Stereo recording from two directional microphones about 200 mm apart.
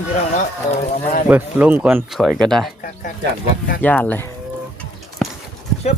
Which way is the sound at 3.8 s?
10° left (ahead or behind).